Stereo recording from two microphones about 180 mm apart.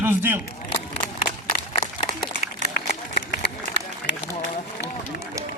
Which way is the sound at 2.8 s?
70° left (ahead or behind).